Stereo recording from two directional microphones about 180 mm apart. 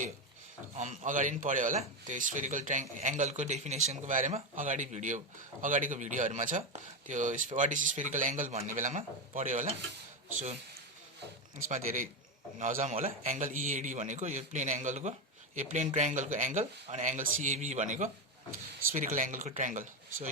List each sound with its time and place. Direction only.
0.8 s speech: 45° right (ahead or behind)
11.5 s speech: 45° right (ahead or behind)